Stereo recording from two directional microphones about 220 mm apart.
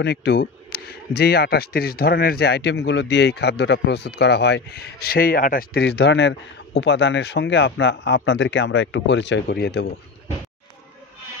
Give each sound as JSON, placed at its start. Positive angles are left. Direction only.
{"t": 0.0, "sound": "speech", "side_deg": 50}